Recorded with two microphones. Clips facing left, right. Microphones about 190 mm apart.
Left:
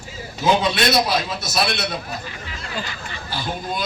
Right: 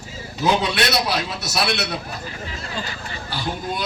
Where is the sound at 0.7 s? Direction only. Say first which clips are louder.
Left 2 dB; 70° right (ahead or behind).